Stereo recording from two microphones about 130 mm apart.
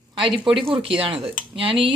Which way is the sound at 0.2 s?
40° right (ahead or behind).